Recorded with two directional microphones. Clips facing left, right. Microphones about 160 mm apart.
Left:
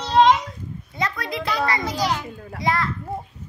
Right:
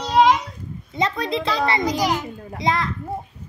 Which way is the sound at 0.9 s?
25° right (ahead or behind).